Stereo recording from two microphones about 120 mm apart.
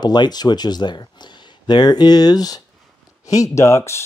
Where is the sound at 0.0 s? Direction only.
35° left (ahead or behind).